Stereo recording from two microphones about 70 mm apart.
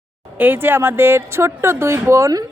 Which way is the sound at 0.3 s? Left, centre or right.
Right.